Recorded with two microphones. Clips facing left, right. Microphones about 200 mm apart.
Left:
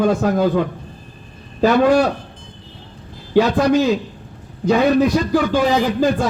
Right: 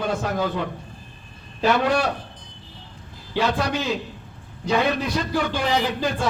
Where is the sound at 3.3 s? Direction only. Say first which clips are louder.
Left 9 dB; 50° left (ahead or behind).